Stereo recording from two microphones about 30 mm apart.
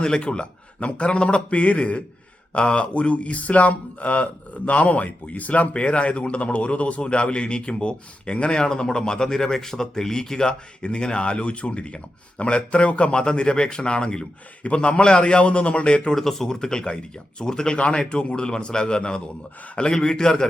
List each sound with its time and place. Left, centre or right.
0.0 s a man's voice: left
1.5 s speech: left
5.8 s a man's voice: left
8.5 s a man's voice: left
16.1 s speech: centre
16.5 s speech: left
17.7 s a man's voice: left